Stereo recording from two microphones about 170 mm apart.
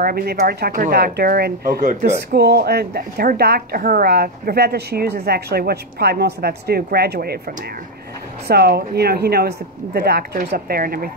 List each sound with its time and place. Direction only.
0.0 s speech: 65° right (ahead or behind)
2.3 s a woman's voice: 70° right (ahead or behind)